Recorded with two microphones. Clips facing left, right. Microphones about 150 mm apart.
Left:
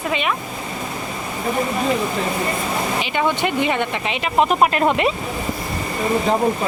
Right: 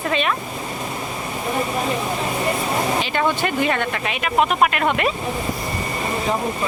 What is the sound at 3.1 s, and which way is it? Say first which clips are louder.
Speech: left 3 dB; 15° left (ahead or behind).